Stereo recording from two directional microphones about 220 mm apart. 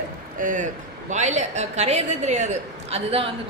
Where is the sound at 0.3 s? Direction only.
35° right (ahead or behind).